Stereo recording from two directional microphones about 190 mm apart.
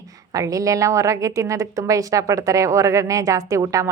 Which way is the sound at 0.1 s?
20° right (ahead or behind).